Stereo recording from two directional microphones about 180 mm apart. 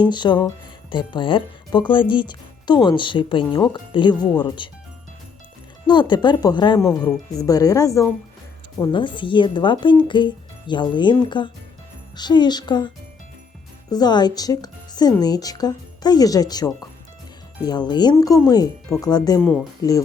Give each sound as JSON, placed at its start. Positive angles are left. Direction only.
{"t": 0.1, "sound": "speech", "side_deg": 25}
{"t": 5.9, "sound": "speech", "side_deg": 25}
{"t": 13.9, "sound": "speech", "side_deg": 25}
{"t": 19.4, "sound": "speech", "side_deg": 5}